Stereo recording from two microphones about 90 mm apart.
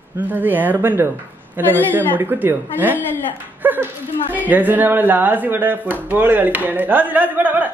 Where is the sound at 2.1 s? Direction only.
20° right (ahead or behind).